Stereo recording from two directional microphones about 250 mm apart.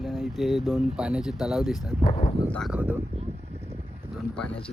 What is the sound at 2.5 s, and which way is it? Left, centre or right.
Speech, centre.